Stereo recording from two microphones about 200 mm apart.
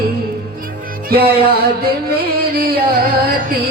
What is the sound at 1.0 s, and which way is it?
Music, 50° right (ahead or behind).